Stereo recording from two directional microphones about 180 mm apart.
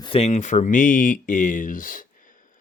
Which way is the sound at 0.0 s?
35° left (ahead or behind).